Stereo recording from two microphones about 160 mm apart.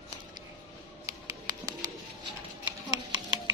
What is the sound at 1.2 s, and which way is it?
Music, 25° right (ahead or behind).